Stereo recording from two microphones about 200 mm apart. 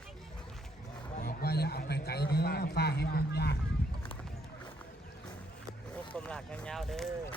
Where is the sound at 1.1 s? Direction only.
50° left (ahead or behind).